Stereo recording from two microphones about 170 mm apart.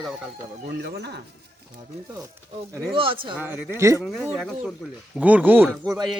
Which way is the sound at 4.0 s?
Centre (ahead or behind).